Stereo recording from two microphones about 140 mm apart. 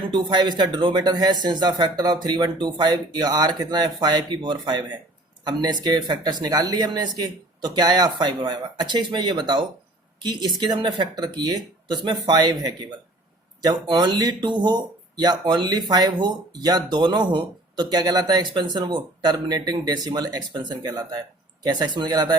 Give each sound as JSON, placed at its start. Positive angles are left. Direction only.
{"t": 0.1, "sound": "speech", "side_deg": -30}